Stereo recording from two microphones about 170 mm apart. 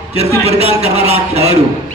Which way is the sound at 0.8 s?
40° right (ahead or behind).